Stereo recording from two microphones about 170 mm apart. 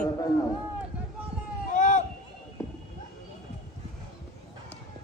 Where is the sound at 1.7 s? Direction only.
45° left (ahead or behind).